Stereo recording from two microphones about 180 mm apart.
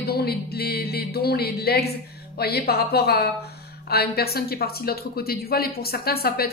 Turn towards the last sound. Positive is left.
turn(degrees=60)  # may be behind; listen again after turning